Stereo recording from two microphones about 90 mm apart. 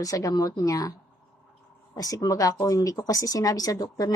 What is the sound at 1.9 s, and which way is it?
A woman's voice, 45° left (ahead or behind).